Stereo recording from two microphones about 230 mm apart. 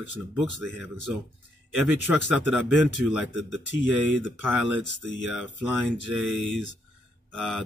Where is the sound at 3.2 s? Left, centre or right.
Left.